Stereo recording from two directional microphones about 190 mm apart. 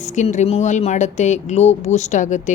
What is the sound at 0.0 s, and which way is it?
Speech, 40° left (ahead or behind).